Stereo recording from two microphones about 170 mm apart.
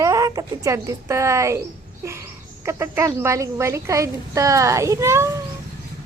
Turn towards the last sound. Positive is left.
turn(degrees=-15)  # may be behind; listen again after turning